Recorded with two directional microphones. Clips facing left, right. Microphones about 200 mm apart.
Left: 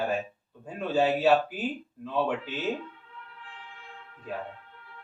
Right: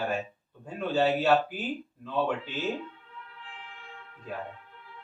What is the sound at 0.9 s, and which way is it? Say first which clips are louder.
Speech: left 1 dB; centre (ahead or behind).